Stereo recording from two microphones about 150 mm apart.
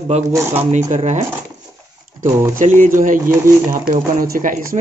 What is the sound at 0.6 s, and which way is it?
Speech, 50° right (ahead or behind).